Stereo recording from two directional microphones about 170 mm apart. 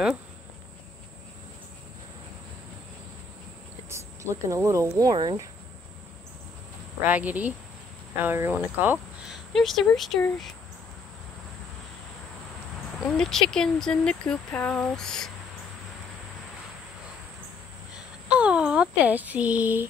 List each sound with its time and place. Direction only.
3.9 s speech: 15° right (ahead or behind)
7.1 s speech: 10° right (ahead or behind)
9.5 s speech: centre (ahead or behind)
13.2 s speech: 5° left (ahead or behind)
18.3 s speech: 5° right (ahead or behind)